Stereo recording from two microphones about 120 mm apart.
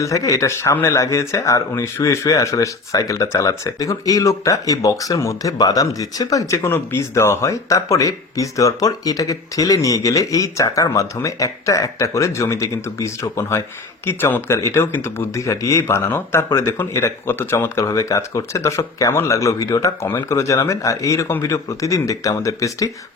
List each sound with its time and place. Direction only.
0.0 s speech: 30° left (ahead or behind)